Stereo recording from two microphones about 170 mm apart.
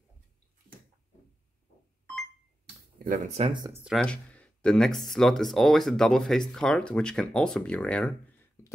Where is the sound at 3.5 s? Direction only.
20° right (ahead or behind).